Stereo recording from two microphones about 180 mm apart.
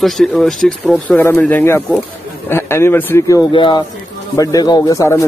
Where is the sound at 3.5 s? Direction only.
30° left (ahead or behind).